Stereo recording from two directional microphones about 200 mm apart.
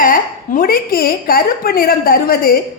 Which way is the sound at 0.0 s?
45° left (ahead or behind).